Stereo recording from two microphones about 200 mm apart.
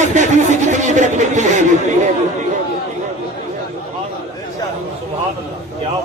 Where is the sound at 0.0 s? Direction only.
35° right (ahead or behind).